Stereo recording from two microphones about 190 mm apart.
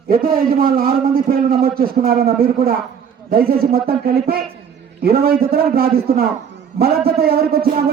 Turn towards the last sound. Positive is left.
turn(degrees=-55)  # may be behind; listen again after turning